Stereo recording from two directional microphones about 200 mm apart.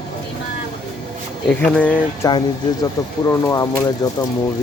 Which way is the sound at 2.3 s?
20° left (ahead or behind).